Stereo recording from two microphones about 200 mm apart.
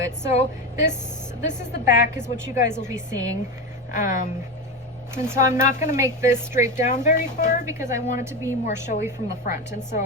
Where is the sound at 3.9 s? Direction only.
40° left (ahead or behind).